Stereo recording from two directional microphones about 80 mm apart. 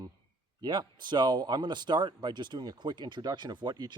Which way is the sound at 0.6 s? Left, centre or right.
Right.